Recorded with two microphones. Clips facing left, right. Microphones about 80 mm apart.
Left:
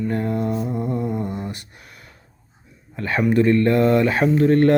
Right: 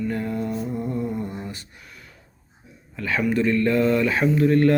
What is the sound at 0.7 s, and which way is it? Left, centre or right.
Music, centre.